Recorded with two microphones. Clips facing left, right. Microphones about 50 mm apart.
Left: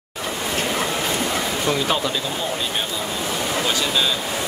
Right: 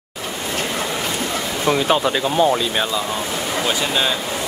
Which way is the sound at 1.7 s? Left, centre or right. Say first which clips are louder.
Right 6 dB; right.